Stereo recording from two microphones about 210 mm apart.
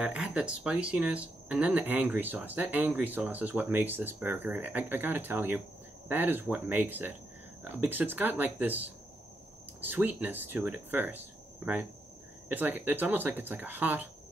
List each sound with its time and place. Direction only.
0.0 s speech: 5° right (ahead or behind)
12.4 s speech: 10° right (ahead or behind)